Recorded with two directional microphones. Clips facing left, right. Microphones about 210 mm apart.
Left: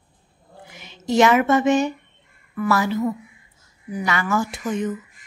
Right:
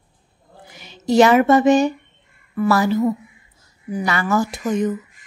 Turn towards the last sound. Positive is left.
turn(degrees=-40)  # may be behind; listen again after turning